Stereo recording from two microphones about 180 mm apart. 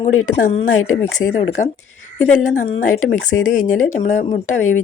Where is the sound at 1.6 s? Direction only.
45° left (ahead or behind).